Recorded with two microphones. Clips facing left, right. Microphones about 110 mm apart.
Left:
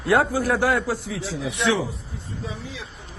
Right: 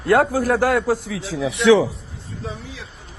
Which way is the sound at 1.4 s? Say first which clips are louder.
Right 9 dB; 85° right.